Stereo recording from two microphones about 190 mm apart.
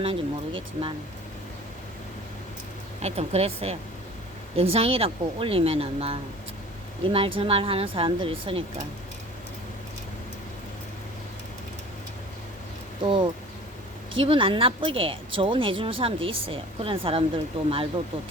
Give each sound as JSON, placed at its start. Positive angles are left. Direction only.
{"t": 0.0, "sound": "speech", "side_deg": -30}
{"t": 3.0, "sound": "speech", "side_deg": -35}
{"t": 13.0, "sound": "speech", "side_deg": -25}